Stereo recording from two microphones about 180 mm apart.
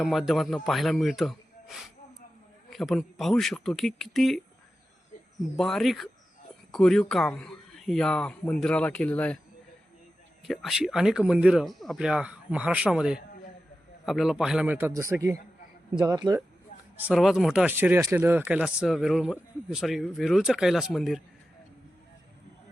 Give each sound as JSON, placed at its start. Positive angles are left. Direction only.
{"t": 0.0, "sound": "speech", "side_deg": 0}
{"t": 5.5, "sound": "speech", "side_deg": 0}
{"t": 10.4, "sound": "a man's voice", "side_deg": 0}
{"t": 17.0, "sound": "speech", "side_deg": 0}